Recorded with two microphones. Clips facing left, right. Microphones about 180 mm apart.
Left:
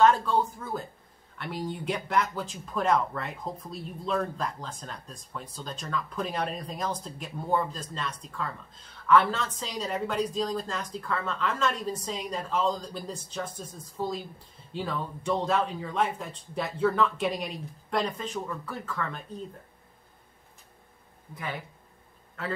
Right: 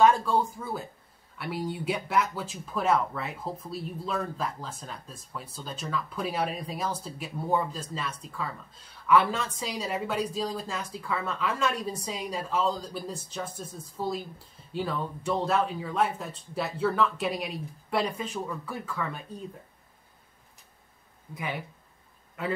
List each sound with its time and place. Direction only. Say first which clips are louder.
0.0 s speech: even; 10° right (ahead or behind)
22.4 s a man's voice: right 3 dB; 15° right (ahead or behind)